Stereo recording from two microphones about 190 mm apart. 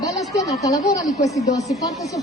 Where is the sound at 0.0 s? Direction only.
20° left (ahead or behind).